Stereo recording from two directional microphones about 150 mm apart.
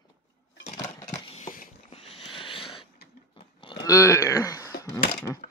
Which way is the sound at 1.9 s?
40° left (ahead or behind).